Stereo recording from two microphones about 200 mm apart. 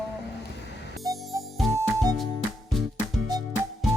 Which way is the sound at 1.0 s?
Centre (ahead or behind).